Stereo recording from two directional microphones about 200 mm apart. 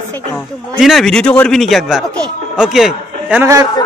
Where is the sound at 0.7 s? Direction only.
Centre (ahead or behind).